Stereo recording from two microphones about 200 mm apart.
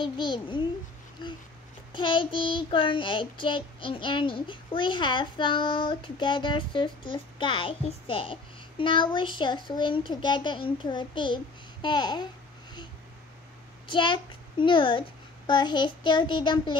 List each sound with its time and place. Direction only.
0.0 s child singing: 25° left (ahead or behind)
13.8 s a child's voice: 25° left (ahead or behind)